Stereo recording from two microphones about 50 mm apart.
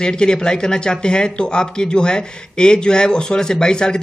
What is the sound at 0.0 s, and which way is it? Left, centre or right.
Speech, centre.